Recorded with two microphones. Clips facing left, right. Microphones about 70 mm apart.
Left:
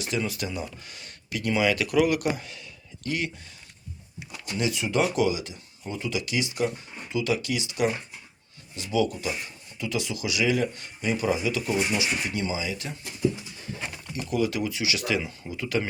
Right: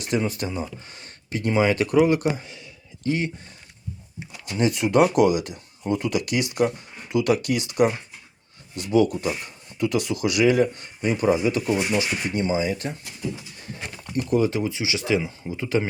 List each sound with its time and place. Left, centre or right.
0.1 s speech: right
4.2 s speech: right
14.1 s speech: right